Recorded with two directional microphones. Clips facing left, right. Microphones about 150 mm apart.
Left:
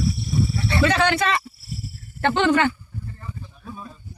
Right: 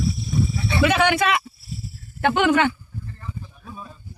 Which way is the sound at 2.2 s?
10° right (ahead or behind).